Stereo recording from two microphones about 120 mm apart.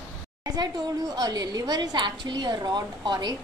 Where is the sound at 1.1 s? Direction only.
35° right (ahead or behind).